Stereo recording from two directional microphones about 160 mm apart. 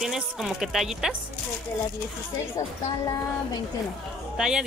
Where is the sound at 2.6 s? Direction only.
20° left (ahead or behind).